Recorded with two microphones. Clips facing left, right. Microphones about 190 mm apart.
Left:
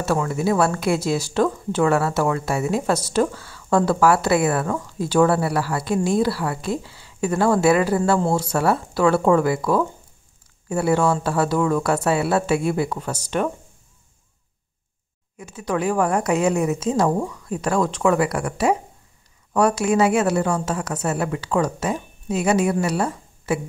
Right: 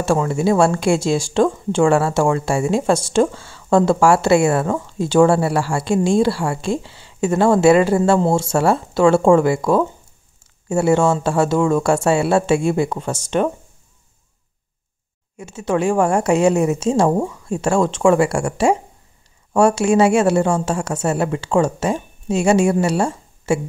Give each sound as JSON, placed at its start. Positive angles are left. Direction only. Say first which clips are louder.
{"t": 0.0, "sound": "speech", "louder": "right 4 dB", "side_deg": -25}
{"t": 15.3, "sound": "speech", "louder": "right 4 dB", "side_deg": -25}